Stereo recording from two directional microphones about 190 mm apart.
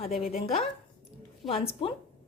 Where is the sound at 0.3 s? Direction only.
35° left (ahead or behind).